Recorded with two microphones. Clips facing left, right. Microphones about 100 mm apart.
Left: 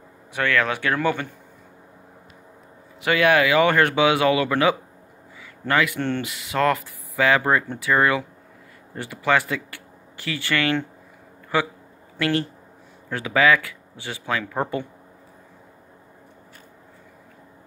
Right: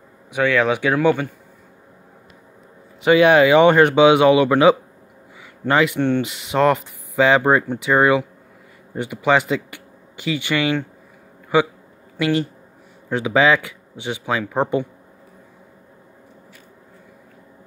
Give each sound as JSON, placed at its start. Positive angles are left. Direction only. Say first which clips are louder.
{"t": 0.3, "sound": "speech", "louder": "right 5 dB", "side_deg": -15}
{"t": 3.0, "sound": "speech", "louder": "right 6 dB", "side_deg": -20}